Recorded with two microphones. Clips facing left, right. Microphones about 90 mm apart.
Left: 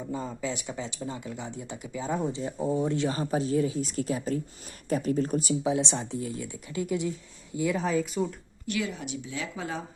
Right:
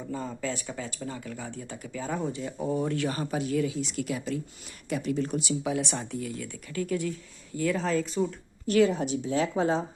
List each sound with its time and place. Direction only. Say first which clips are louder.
0.1 s speech: right 1 dB; 15° left (ahead or behind); by 5.5 s 40° left (ahead or behind)
5.6 s speech: left 2 dB; 25° left (ahead or behind); by 8.4 s 5° left (ahead or behind)
8.6 s a woman's voice: right 9 dB; 40° right (ahead or behind)